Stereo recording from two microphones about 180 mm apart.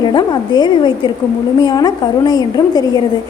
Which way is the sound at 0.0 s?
25° left (ahead or behind).